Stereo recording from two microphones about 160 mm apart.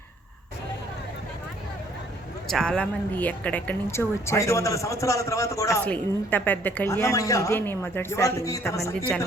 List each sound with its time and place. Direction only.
2.5 s a woman's voice: 5° left (ahead or behind)